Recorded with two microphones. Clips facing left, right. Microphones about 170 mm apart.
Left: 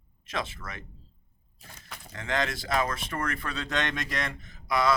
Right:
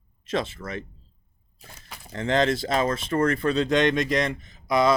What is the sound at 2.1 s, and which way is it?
Speech, 30° right (ahead or behind).